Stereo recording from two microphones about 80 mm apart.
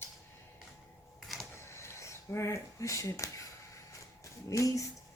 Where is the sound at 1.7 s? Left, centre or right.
Left.